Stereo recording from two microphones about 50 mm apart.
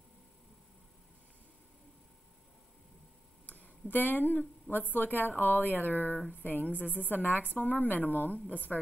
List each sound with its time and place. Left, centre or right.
3.4 s a woman's voice: left